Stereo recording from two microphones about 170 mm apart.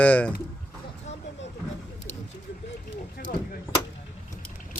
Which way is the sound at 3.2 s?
65° left (ahead or behind).